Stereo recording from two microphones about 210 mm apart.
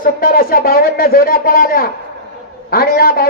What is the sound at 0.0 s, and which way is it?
Speech, 45° left (ahead or behind).